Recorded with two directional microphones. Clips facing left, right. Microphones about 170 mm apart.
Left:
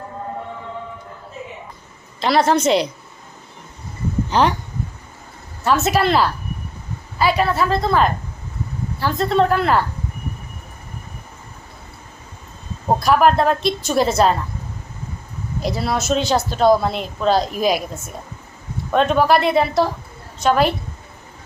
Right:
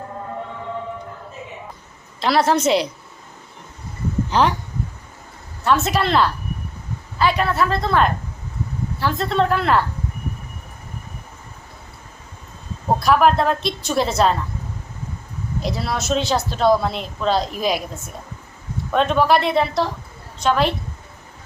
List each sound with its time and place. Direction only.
2.2 s a woman's voice: centre (ahead or behind)
4.3 s speech: centre (ahead or behind)
5.6 s a woman's voice: 5° left (ahead or behind)
13.0 s a woman's voice: centre (ahead or behind)
15.6 s a woman's voice: centre (ahead or behind)